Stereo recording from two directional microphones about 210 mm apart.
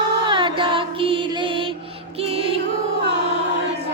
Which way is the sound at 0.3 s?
25° right (ahead or behind).